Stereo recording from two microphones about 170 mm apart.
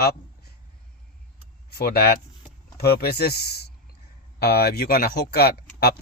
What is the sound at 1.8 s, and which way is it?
A man's voice, 65° left (ahead or behind).